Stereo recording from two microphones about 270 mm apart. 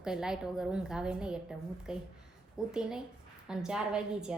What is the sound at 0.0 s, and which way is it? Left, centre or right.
A woman's voice, centre.